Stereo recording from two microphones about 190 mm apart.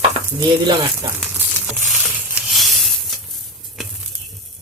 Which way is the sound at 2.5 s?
Centre (ahead or behind).